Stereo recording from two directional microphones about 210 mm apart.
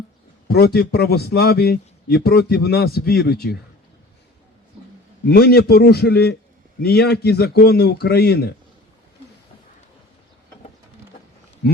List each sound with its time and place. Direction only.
0.4 s a man's voice: 50° left (ahead or behind)
5.3 s a man's voice: 50° left (ahead or behind)